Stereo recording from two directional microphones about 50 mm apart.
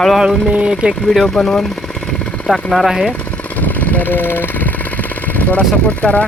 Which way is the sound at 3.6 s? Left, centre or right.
Left.